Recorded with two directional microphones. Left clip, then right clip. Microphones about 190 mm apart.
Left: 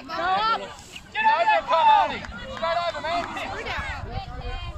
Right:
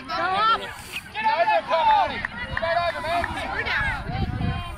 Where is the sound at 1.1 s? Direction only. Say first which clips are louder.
Left 1 dB; 35° right (ahead or behind).